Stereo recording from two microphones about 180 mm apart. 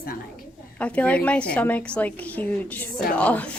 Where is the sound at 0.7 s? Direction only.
5° left (ahead or behind).